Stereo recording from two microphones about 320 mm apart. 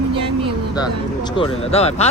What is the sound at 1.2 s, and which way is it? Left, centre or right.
Speech, centre.